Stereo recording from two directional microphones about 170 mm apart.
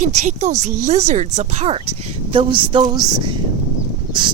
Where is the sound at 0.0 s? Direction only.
45° right (ahead or behind).